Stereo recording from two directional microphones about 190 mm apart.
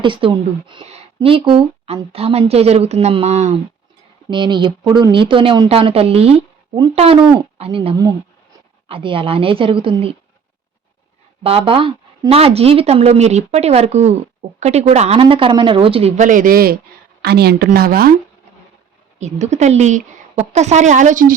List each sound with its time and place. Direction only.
0.0 s speech: 25° right (ahead or behind)
4.3 s speech: 25° right (ahead or behind)
11.4 s a woman's voice: 30° right (ahead or behind); by 18.1 s 50° right (ahead or behind)
19.2 s speech: 40° right (ahead or behind)